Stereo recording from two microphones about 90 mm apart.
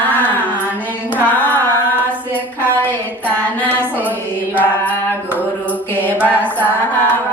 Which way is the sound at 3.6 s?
20° left (ahead or behind).